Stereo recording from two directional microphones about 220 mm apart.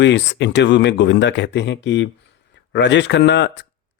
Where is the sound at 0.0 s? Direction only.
55° left (ahead or behind).